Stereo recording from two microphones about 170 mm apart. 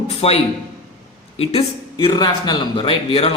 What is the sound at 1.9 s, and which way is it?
A man's voice, 25° left (ahead or behind).